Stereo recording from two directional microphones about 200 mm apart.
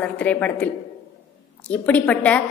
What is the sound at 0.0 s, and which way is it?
Speech, 5° left (ahead or behind).